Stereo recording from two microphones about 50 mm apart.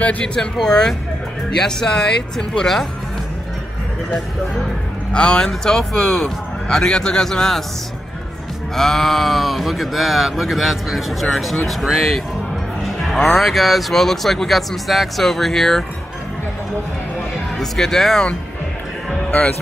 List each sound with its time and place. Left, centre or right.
0.2 s a man's voice: centre
5.1 s a man's voice: centre
8.7 s speech: centre
17.6 s a man's voice: centre